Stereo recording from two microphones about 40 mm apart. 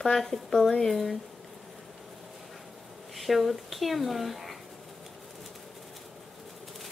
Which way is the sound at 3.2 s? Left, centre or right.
Centre.